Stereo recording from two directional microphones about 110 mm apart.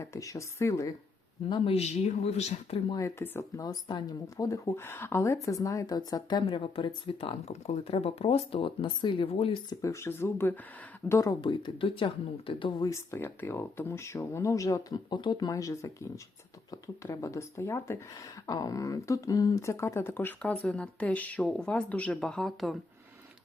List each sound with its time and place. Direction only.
0.0 s speech: 30° left (ahead or behind)
1.6 s speech: 70° left (ahead or behind)
3.0 s speech: 25° left (ahead or behind)
6.4 s speech: 55° left (ahead or behind)
7.4 s speech: 85° left; by 8.4 s 65° left (ahead or behind)
8.5 s speech: 50° left (ahead or behind)
9.2 s speech: 60° left (ahead or behind)
9.6 s speech: 30° left (ahead or behind)
11.3 s speech: 50° left (ahead or behind)
12.8 s speech: 25° left (ahead or behind); by 22.8 s 5° left (ahead or behind)